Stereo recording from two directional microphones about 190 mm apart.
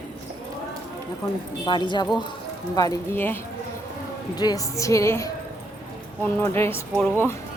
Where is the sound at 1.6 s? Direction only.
25° left (ahead or behind).